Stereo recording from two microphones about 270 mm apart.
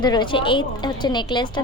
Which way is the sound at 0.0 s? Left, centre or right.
Centre.